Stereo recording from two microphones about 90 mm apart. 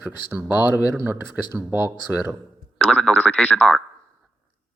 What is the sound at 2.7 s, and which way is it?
Speech, 10° left (ahead or behind).